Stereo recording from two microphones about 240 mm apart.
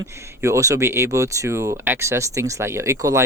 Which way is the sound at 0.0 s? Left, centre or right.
Centre.